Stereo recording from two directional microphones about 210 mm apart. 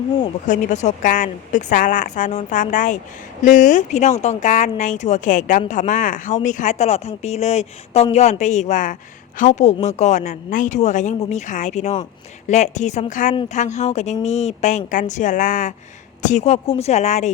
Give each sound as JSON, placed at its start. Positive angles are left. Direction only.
{"t": 0.2, "sound": "speech", "side_deg": 35}